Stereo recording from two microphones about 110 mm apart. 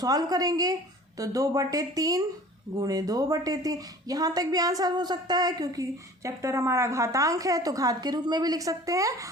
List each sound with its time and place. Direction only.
0.0 s speech: 35° right (ahead or behind)